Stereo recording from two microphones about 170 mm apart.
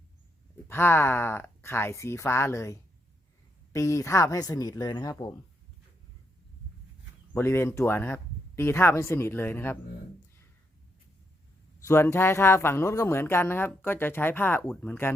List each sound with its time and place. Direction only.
0.7 s a woman's voice: 15° left (ahead or behind)
7.3 s speech: 15° left (ahead or behind)
11.9 s speech: 15° left (ahead or behind)